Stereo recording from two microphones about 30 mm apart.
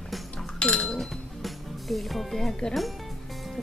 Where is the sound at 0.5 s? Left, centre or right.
Left.